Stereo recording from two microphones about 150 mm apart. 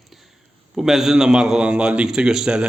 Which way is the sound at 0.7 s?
5° right (ahead or behind).